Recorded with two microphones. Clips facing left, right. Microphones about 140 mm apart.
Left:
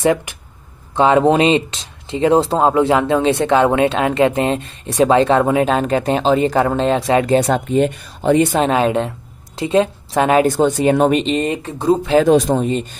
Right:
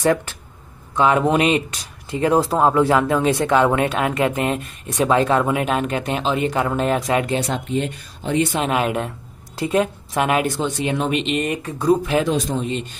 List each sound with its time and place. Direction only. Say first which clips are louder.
0.0 s speech: left 2 dB; 15° left (ahead or behind)
0.9 s speech: left 4 dB; 30° left (ahead or behind)
7.3 s speech: left 8 dB; 55° left (ahead or behind)
8.5 s speech: left 5 dB; 30° left (ahead or behind)
10.5 s speech: left 8 dB; 45° left (ahead or behind); by 12.2 s 25° left (ahead or behind)
12.4 s speech: left 7 dB; 65° left (ahead or behind)